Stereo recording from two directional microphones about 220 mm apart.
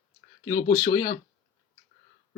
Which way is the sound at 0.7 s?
15° left (ahead or behind).